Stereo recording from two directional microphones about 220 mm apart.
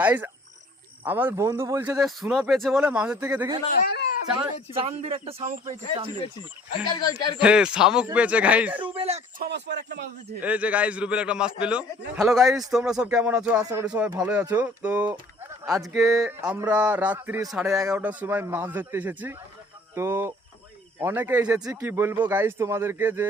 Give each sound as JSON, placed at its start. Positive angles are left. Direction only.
{"t": 0.0, "sound": "speech", "side_deg": -5}
{"t": 2.0, "sound": "speech", "side_deg": 0}
{"t": 3.7, "sound": "speech", "side_deg": 40}
{"t": 4.4, "sound": "speech", "side_deg": -25}
{"t": 6.8, "sound": "speech", "side_deg": 20}
{"t": 7.3, "sound": "a man's voice", "side_deg": -5}
{"t": 9.0, "sound": "speech", "side_deg": -30}
{"t": 9.4, "sound": "speech", "side_deg": -50}
{"t": 10.4, "sound": "a man's voice", "side_deg": -5}
{"t": 16.0, "sound": "a man's voice", "side_deg": 0}